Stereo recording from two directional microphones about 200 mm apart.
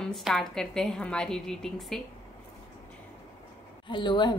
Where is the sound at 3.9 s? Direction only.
25° left (ahead or behind).